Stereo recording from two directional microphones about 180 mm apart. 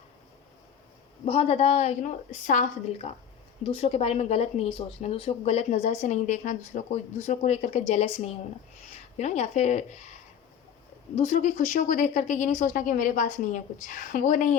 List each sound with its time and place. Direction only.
1.2 s speech: 35° left (ahead or behind)
11.1 s a woman's voice: 40° left (ahead or behind)